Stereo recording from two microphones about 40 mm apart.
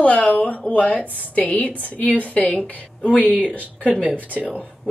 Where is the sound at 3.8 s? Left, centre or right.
Right.